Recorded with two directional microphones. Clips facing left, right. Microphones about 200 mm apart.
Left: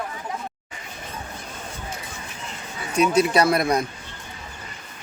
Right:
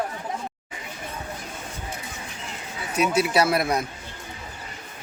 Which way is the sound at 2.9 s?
5° right (ahead or behind).